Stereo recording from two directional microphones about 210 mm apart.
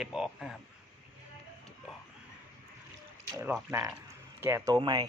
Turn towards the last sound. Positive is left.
turn(degrees=-20)  # may be behind; listen again after turning